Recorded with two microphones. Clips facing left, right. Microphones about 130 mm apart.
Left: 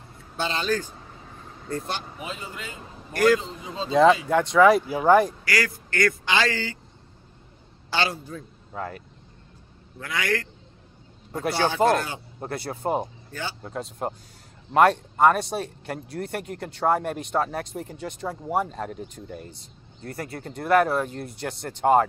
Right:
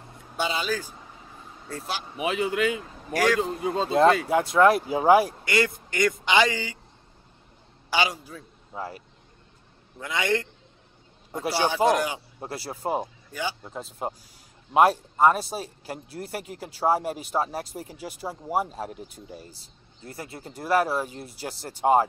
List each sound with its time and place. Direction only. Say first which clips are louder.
0.4 s speech: left 1 dB; 10° right (ahead or behind)
2.1 s speech: right 11 dB; 75° right (ahead or behind)
3.1 s a man's voice: left 3 dB; centre (ahead or behind)
3.3 s a man's voice: right 6 dB; 60° right (ahead or behind)
3.9 s speech: left 2 dB; centre (ahead or behind)
5.4 s a man's voice: right 2 dB; 25° right (ahead or behind)
7.9 s a man's voice: right 1 dB; 10° right (ahead or behind)
9.9 s a man's voice: right 1 dB; 20° right (ahead or behind)
11.6 s speech: left 1 dB; 15° right (ahead or behind)
13.6 s speech: left 3 dB; centre (ahead or behind)
19.2 s speech: left 4 dB; 55° left (ahead or behind)
20.2 s speech: left 4 dB; centre (ahead or behind)